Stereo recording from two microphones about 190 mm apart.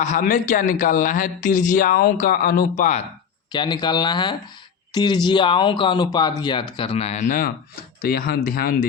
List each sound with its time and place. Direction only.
0.0 s speech: 40° left (ahead or behind)
3.5 s speech: 25° left (ahead or behind); by 8.9 s 50° left (ahead or behind)